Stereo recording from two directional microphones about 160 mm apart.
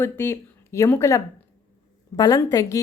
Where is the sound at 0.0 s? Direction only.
15° left (ahead or behind).